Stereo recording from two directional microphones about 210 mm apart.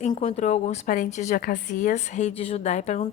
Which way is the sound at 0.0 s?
30° left (ahead or behind).